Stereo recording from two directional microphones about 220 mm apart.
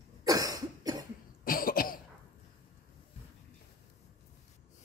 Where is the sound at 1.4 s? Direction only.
40° left (ahead or behind).